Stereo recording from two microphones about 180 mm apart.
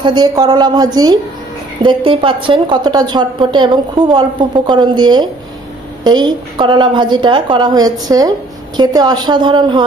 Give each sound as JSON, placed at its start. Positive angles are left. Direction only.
{"t": 0.0, "sound": "a woman's voice", "side_deg": -25}